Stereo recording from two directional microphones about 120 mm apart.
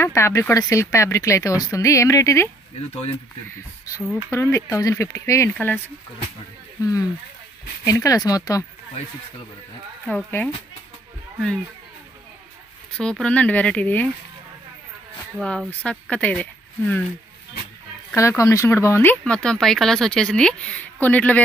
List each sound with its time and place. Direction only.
0.0 s speech: 20° left (ahead or behind)
2.9 s speech: 60° left (ahead or behind)
3.4 s speech: 25° left (ahead or behind)
6.8 s speech: 25° left (ahead or behind)
10.0 s a woman's voice: 15° left (ahead or behind)
12.9 s a woman's voice: 5° left (ahead or behind)
15.8 s speech: 10° left (ahead or behind)
18.1 s speech: 25° left (ahead or behind)
19.2 s a woman's voice: 10° left (ahead or behind)